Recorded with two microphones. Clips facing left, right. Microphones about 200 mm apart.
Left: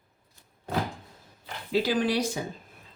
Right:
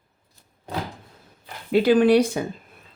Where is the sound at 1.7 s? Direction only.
60° right (ahead or behind).